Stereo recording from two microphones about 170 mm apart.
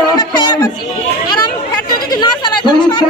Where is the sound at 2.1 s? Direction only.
25° left (ahead or behind).